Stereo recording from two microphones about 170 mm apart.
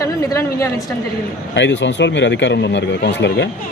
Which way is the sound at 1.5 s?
90° left.